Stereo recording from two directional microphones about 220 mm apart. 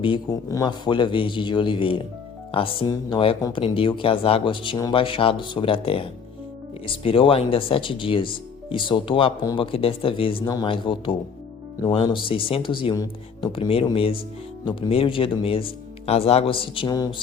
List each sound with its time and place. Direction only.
0.0 s speech: 20° left (ahead or behind)